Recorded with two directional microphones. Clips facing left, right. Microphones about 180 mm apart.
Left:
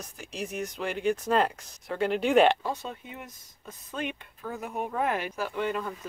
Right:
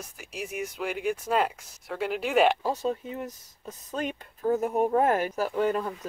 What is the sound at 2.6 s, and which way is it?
Speech, 40° right (ahead or behind).